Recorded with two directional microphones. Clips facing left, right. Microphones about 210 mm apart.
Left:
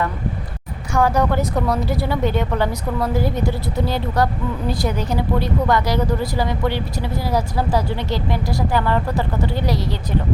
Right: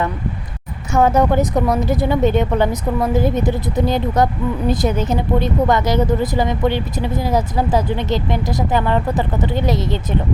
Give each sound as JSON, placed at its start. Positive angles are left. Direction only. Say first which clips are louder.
{"t": 0.9, "sound": "speech", "louder": "right 4 dB", "side_deg": -20}